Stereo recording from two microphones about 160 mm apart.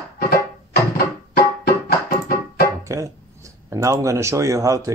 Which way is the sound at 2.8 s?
20° right (ahead or behind).